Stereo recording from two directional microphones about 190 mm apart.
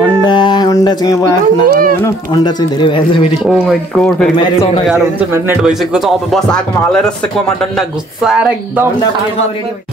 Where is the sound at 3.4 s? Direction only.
Centre (ahead or behind).